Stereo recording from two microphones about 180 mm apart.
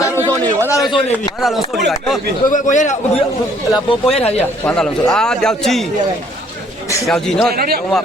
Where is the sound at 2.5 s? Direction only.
45° left (ahead or behind).